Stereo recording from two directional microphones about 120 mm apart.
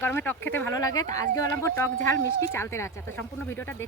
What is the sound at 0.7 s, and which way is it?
Speech, 30° left (ahead or behind).